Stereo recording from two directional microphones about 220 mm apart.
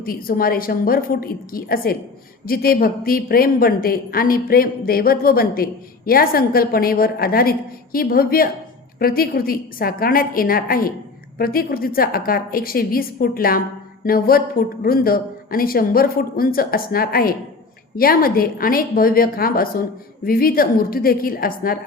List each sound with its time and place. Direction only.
0.0 s a woman's voice: 40° left (ahead or behind)